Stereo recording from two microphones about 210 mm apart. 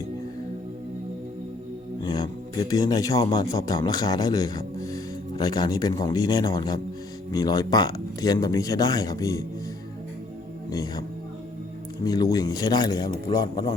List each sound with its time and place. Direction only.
2.0 s a man's voice: 20° left (ahead or behind)
10.7 s speech: 15° left (ahead or behind)
12.0 s speech: 15° left (ahead or behind)